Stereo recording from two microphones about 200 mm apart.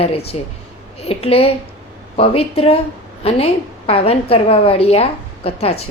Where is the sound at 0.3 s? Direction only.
30° left (ahead or behind).